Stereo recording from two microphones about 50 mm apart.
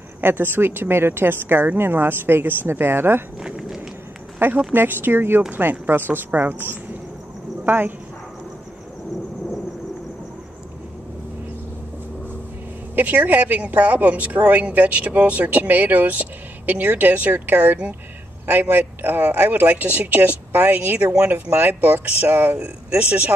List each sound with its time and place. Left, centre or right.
0.2 s a woman's voice: right
3.3 s walk: centre
4.4 s a woman's voice: right
12.9 s speech: right
22.6 s speech: right